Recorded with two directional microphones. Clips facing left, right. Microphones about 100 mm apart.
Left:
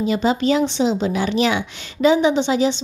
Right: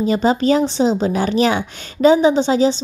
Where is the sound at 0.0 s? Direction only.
40° right (ahead or behind).